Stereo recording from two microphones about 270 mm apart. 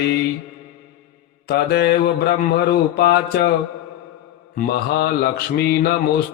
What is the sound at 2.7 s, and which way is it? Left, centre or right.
Mantra, left.